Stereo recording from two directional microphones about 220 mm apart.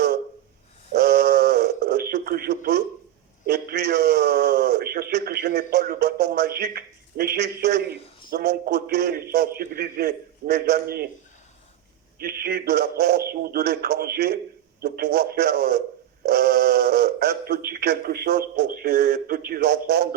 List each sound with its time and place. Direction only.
0.9 s radio: 45° right (ahead or behind)
3.4 s a man's voice: 45° right (ahead or behind)
12.2 s a man's voice: 45° right (ahead or behind)
16.2 s a sound: 45° right (ahead or behind)
17.7 s a man's voice: 45° right (ahead or behind)